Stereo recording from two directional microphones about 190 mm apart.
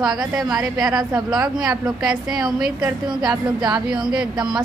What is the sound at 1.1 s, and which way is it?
A woman's voice, 20° right (ahead or behind).